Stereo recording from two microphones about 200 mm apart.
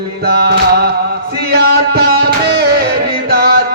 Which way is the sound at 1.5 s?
55° right (ahead or behind).